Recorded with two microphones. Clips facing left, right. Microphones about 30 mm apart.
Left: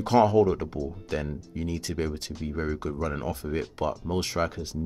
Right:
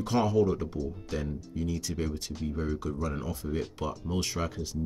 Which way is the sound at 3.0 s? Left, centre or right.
Left.